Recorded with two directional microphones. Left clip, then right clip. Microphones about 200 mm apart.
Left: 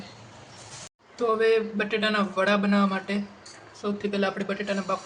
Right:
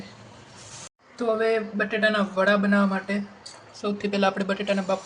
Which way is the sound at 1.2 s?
5° right (ahead or behind).